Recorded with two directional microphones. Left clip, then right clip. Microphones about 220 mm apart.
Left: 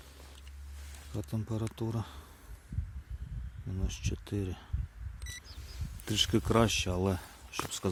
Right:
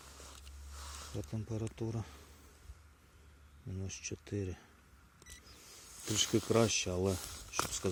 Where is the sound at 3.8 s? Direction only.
15° left (ahead or behind).